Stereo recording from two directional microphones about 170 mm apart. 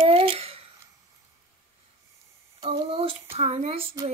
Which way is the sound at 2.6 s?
35° right (ahead or behind).